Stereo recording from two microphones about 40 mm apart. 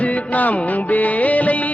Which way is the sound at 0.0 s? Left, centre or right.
Left.